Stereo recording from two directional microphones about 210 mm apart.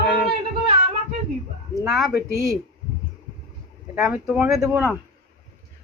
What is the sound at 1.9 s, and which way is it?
Speech, centre (ahead or behind).